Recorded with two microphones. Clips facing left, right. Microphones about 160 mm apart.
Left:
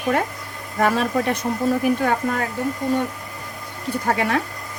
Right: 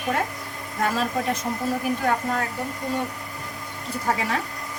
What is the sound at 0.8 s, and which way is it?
Speech, 65° left (ahead or behind).